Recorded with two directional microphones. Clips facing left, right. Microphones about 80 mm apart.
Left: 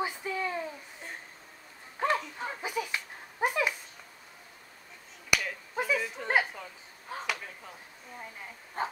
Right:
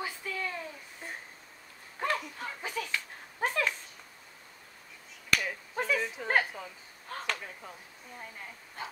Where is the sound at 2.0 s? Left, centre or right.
Centre.